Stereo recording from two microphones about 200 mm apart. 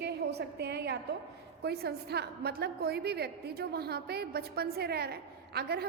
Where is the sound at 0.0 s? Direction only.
55° right (ahead or behind).